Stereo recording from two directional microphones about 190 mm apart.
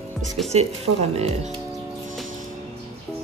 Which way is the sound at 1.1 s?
35° right (ahead or behind).